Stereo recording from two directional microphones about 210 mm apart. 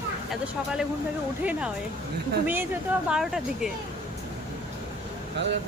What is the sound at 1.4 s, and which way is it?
Speech, 5° right (ahead or behind).